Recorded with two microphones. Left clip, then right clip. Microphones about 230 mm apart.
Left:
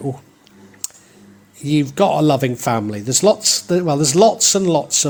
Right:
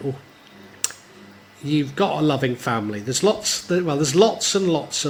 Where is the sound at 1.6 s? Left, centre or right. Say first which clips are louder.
Left 5 dB; left.